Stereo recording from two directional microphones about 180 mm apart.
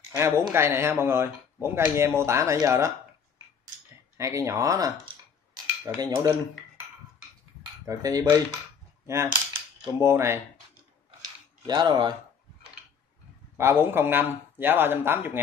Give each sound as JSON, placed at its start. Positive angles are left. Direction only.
{"t": 0.1, "sound": "speech", "side_deg": -15}
{"t": 4.2, "sound": "speech", "side_deg": -15}
{"t": 7.8, "sound": "speech", "side_deg": -15}
{"t": 11.1, "sound": "a sound", "side_deg": -25}
{"t": 13.6, "sound": "speech", "side_deg": -15}